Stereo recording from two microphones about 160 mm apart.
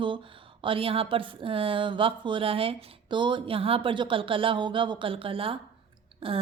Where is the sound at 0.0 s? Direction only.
30° right (ahead or behind).